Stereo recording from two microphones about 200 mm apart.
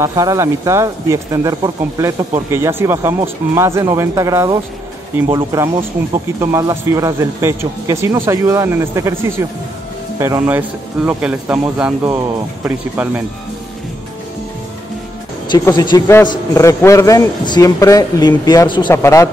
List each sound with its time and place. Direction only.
0.0 s speech: 15° right (ahead or behind)
15.4 s a man's voice: 20° left (ahead or behind)